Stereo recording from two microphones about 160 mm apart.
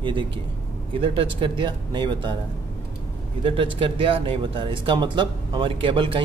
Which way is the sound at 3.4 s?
35° right (ahead or behind).